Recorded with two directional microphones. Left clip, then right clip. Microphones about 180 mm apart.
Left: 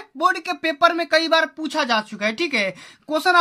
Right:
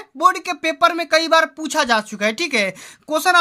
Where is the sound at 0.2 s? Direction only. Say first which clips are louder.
Right 3 dB; 25° right (ahead or behind).